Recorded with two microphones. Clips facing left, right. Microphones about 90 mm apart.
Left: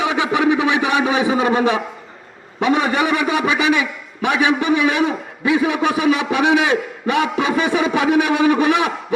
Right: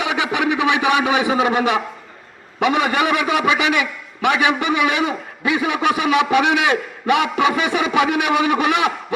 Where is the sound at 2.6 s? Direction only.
70° right (ahead or behind).